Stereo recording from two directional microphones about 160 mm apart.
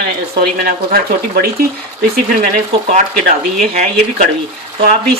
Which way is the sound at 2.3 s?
55° right (ahead or behind).